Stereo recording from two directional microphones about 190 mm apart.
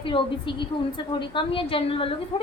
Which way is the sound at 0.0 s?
25° left (ahead or behind).